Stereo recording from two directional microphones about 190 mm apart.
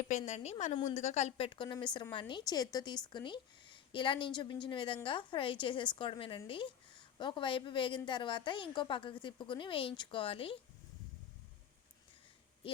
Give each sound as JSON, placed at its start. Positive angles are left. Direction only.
{"t": 0.1, "sound": "a woman's voice", "side_deg": 35}